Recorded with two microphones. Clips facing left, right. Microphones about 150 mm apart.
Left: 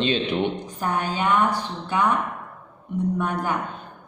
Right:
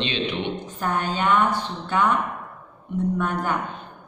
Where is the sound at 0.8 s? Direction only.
10° left (ahead or behind).